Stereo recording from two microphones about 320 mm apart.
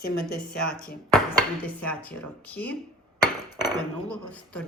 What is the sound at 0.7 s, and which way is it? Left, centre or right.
Speech, centre.